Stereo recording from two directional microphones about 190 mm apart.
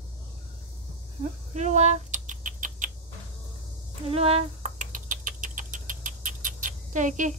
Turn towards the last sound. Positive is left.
turn(degrees=-40)  # may be behind; listen again after turning